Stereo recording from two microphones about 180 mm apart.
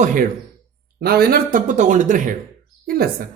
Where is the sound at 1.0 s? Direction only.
60° right (ahead or behind).